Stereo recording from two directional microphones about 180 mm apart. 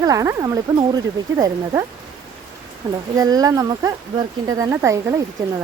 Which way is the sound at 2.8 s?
20° right (ahead or behind).